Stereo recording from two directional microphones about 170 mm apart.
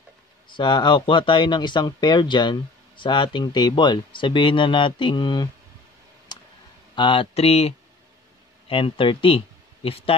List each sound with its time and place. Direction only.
0.5 s speech: 25° left (ahead or behind)
6.3 s a sound: 25° left (ahead or behind)
7.0 s speech: 30° left (ahead or behind)